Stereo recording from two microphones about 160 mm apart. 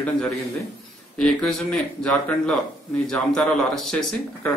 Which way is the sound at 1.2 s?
5° left (ahead or behind).